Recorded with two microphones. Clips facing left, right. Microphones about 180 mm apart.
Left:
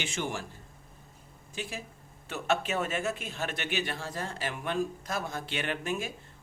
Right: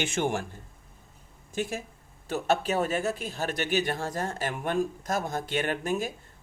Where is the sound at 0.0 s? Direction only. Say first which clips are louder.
Right 6 dB; 50° right (ahead or behind).